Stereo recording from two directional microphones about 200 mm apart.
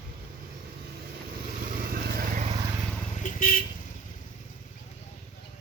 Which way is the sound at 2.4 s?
20° right (ahead or behind).